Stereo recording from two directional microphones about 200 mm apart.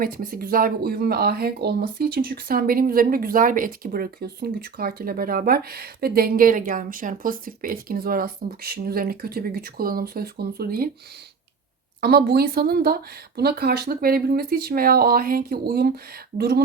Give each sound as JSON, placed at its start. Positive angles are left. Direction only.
{"t": 0.0, "sound": "speech", "side_deg": -45}
{"t": 11.9, "sound": "speech", "side_deg": -50}